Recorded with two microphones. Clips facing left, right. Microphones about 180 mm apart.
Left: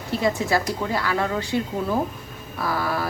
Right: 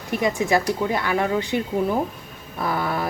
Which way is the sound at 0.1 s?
15° right (ahead or behind).